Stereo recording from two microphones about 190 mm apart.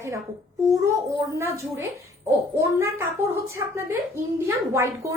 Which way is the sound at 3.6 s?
15° right (ahead or behind).